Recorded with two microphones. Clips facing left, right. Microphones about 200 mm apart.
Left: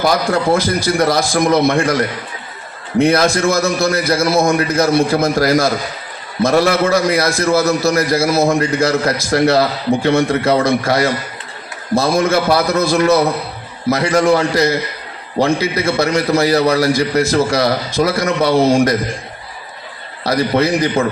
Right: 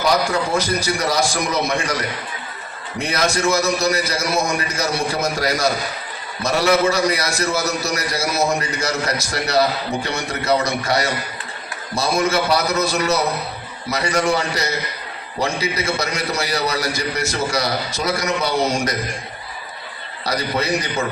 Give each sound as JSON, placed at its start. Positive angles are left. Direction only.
{"t": 0.0, "sound": "a man's voice", "side_deg": 55}
{"t": 20.6, "sound": "a man's voice", "side_deg": 55}